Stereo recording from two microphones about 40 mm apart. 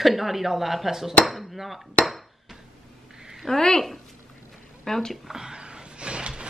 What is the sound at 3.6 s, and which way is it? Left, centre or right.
Speech, centre.